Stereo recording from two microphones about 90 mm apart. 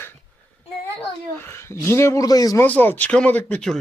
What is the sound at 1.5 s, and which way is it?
Speech, 30° left (ahead or behind).